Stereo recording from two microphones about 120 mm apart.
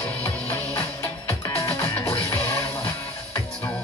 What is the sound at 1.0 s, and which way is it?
Music, 25° left (ahead or behind).